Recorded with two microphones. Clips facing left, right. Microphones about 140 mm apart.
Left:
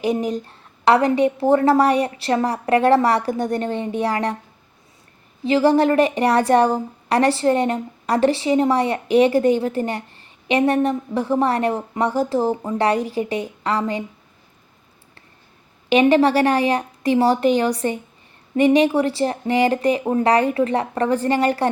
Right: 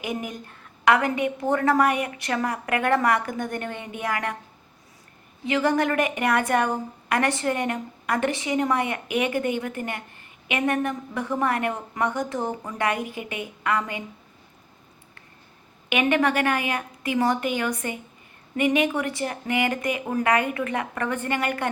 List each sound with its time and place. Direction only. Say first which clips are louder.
0.0 s a woman's voice: left 10 dB; 35° left (ahead or behind)
5.5 s a woman's voice: left 7 dB; 30° left (ahead or behind)
15.9 s a woman's voice: left 7 dB; 30° left (ahead or behind)